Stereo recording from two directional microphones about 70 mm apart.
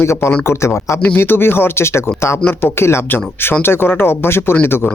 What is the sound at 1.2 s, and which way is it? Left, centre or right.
Speech, left.